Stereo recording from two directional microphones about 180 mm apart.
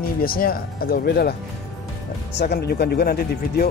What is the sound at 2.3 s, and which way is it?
Music, 65° left (ahead or behind).